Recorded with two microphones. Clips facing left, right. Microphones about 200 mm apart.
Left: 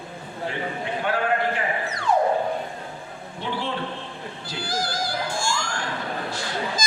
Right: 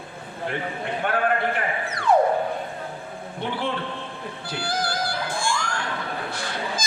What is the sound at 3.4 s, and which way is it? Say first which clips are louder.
Speech: right 1 dB; 55° right (ahead or behind).